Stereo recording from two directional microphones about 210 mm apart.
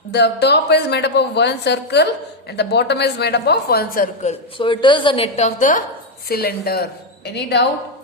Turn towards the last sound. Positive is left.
turn(degrees=50)  # may be behind; listen again after turning